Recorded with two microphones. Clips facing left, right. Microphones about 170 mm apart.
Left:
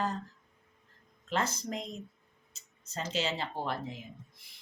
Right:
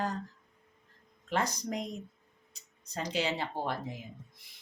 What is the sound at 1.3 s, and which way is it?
Speech, 15° right (ahead or behind).